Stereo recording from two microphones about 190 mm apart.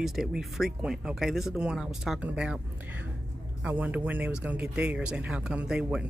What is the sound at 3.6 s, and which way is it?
A man's voice, 10° right (ahead or behind).